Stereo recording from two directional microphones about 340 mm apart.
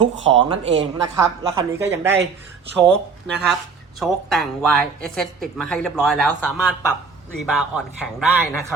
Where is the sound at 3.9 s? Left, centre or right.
Centre.